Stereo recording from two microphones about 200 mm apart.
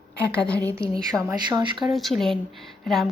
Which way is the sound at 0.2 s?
5° left (ahead or behind).